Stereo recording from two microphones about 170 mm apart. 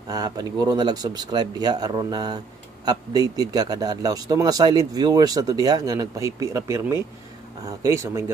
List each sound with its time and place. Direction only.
0.1 s speech: 20° right (ahead or behind)